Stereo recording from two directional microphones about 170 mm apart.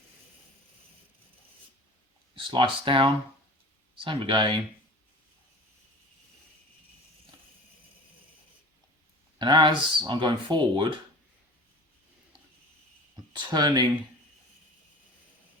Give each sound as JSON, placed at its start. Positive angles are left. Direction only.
{"t": 2.3, "sound": "speech", "side_deg": -30}
{"t": 9.4, "sound": "speech", "side_deg": -25}
{"t": 13.5, "sound": "speech", "side_deg": -25}